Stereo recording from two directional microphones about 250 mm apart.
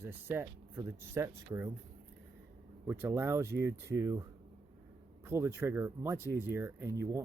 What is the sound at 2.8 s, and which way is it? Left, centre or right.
Speech, centre.